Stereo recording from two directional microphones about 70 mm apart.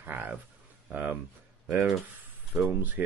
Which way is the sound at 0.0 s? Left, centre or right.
Right.